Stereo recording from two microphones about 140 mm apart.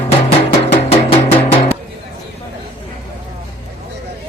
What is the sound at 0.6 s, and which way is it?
Music, 45° left (ahead or behind).